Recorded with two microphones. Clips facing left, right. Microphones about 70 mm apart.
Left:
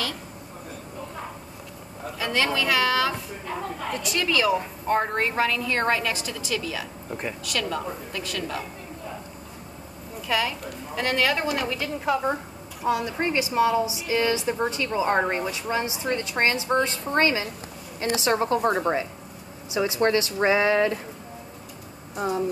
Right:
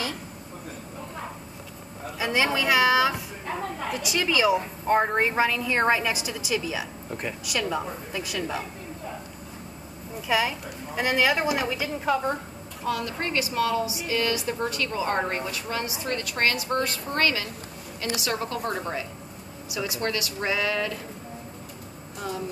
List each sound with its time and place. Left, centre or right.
2.1 s a woman's voice: centre
7.1 s speech: centre
7.4 s a woman's voice: centre
10.2 s a woman's voice: centre
12.8 s a woman's voice: centre
22.1 s speech: left